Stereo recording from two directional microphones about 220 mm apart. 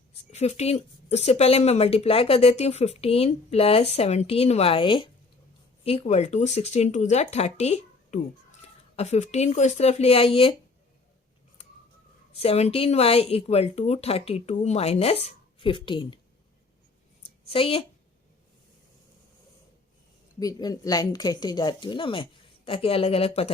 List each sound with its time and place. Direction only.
0.3 s speech: 30° left (ahead or behind)
12.3 s speech: 30° left (ahead or behind)
17.5 s speech: 25° left (ahead or behind)
20.4 s speech: 15° left (ahead or behind)